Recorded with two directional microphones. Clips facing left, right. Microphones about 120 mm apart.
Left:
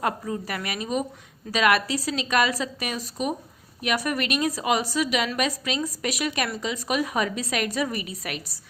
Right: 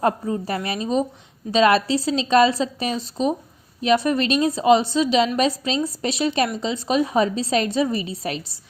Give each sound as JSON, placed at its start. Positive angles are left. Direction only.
{"t": 0.0, "sound": "a woman's voice", "side_deg": -30}